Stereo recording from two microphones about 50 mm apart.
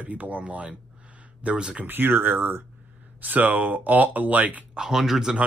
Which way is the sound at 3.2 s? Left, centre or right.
Right.